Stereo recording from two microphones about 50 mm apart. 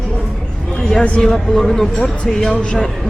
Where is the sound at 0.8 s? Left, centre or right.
Centre.